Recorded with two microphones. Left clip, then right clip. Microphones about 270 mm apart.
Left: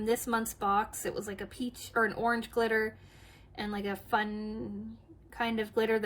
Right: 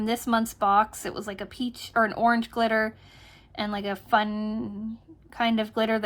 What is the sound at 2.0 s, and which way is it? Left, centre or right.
Speech, centre.